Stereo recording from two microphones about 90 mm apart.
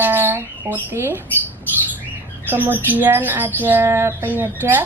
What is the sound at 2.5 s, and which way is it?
Speech, 20° right (ahead or behind).